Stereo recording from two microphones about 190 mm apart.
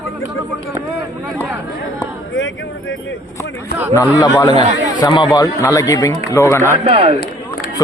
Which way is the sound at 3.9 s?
15° left (ahead or behind).